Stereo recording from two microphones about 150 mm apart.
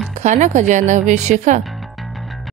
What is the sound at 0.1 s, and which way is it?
Speech, 55° right (ahead or behind).